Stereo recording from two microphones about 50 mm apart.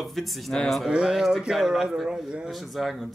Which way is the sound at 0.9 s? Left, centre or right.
Centre.